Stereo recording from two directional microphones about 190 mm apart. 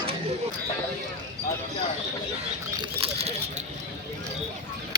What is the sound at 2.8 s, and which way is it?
Patter, 30° right (ahead or behind).